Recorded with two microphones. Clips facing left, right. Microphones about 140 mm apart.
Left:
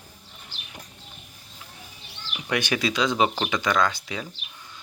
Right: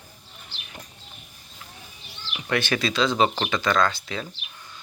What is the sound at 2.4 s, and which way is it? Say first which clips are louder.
Speech: right 1 dB; 15° left (ahead or behind).